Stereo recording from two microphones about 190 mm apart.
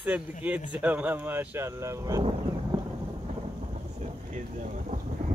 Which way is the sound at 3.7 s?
40° right (ahead or behind).